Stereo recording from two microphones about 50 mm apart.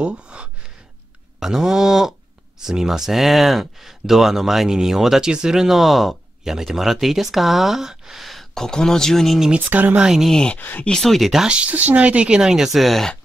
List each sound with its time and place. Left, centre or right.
0.0 s gasp: centre
1.4 s speech: centre
9.6 s speech: right
9.9 s speech: centre
10.9 s speech: centre
11.4 s speech: right
12.4 s speech: centre